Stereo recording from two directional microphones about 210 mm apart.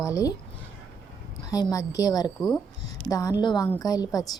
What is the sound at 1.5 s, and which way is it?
A woman's voice, 15° left (ahead or behind).